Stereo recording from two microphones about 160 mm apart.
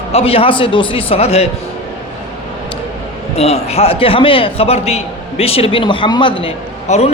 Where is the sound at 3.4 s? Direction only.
40° left (ahead or behind).